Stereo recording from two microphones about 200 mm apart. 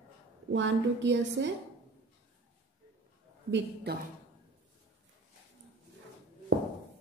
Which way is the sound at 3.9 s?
55° right (ahead or behind).